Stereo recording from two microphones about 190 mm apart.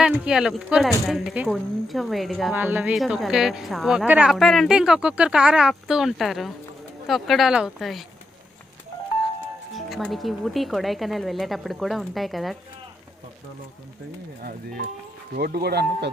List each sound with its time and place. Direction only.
0.0 s speech: 5° right (ahead or behind)
9.7 s speech: centre (ahead or behind)
15.4 s speech: 55° right (ahead or behind)